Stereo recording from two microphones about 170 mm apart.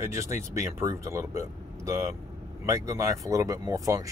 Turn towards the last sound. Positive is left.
turn(degrees=-20)  # may be behind; listen again after turning